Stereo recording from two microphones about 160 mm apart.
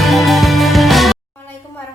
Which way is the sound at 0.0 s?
Centre (ahead or behind).